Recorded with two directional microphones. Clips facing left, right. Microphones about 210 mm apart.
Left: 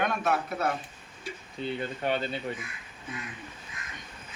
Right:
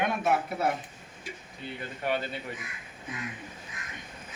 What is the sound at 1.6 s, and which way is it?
Speech, 30° left (ahead or behind).